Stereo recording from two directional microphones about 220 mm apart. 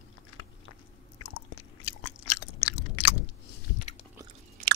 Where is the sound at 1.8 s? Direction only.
90° left.